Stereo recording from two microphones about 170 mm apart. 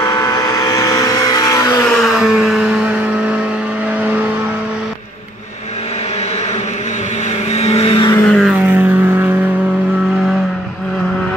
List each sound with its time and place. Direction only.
0.0 s vehicle: 20° left (ahead or behind)
1.9 s vehicle: centre (ahead or behind)
7.5 s vehicle: 40° left (ahead or behind)
8.1 s vehicle: 10° left (ahead or behind)
8.4 s vehicle: 5° right (ahead or behind)